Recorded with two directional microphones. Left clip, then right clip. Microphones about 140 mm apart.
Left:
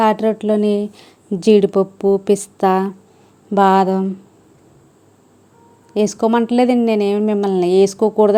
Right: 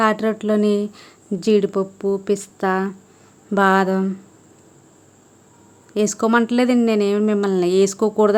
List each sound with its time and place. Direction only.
0.0 s speech: 10° left (ahead or behind)
5.9 s speech: 10° left (ahead or behind)